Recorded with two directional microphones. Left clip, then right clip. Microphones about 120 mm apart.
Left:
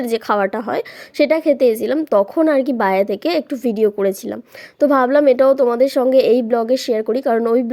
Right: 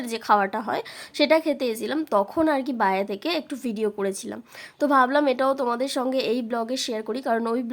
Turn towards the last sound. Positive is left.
turn(degrees=25)  # may be behind; listen again after turning